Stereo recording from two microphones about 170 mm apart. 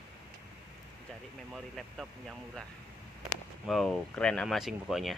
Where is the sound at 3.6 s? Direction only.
Centre (ahead or behind).